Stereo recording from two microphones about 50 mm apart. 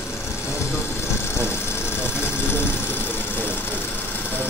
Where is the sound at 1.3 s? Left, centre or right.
Left.